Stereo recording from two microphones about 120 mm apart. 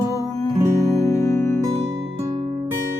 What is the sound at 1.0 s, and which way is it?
Music, 25° left (ahead or behind).